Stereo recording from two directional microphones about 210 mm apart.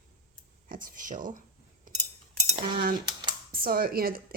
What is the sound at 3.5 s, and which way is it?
Speech, 45° right (ahead or behind).